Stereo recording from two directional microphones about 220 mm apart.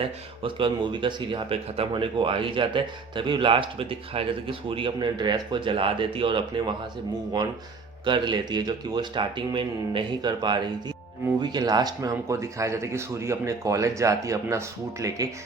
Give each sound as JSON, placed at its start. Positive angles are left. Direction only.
{"t": 0.4, "sound": "speech", "side_deg": -20}
{"t": 8.0, "sound": "speech", "side_deg": -20}